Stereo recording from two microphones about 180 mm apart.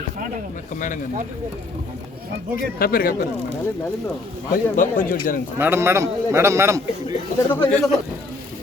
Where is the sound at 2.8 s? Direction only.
55° left (ahead or behind).